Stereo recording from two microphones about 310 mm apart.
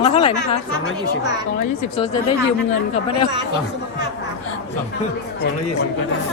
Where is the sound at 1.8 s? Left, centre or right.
Centre.